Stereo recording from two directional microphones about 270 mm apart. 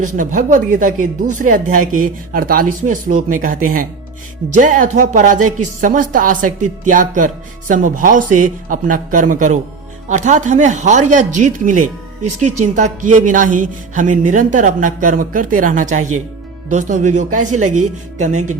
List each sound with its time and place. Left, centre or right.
0.0 s speech: right